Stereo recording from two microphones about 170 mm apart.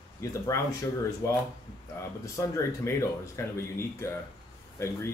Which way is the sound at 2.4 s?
15° left (ahead or behind).